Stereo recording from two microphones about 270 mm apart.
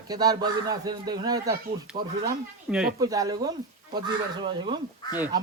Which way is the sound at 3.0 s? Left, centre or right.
Centre.